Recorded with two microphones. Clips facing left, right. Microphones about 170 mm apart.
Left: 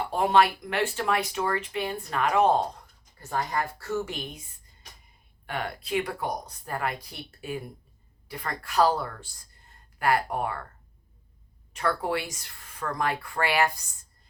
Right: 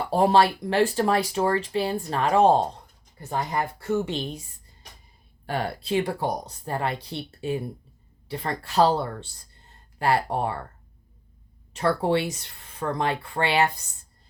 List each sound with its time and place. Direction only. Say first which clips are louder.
0.1 s speech: right 3 dB; 35° right (ahead or behind)
5.5 s speech: right 4 dB; 35° right (ahead or behind)
9.6 s a sound: right 2 dB; 30° right (ahead or behind)
11.7 s speech: right 5 dB; 30° right (ahead or behind)